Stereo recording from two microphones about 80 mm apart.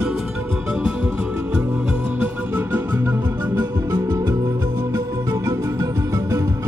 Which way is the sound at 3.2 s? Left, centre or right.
Right.